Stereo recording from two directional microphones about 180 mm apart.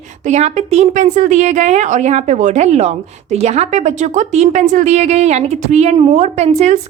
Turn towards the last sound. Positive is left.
turn(degrees=-40)  # may be behind; listen again after turning